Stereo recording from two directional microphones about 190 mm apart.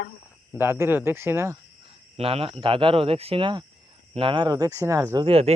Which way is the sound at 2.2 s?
30° right (ahead or behind).